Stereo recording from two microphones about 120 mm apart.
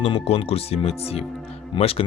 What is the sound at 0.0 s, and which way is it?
Speech, 55° left (ahead or behind).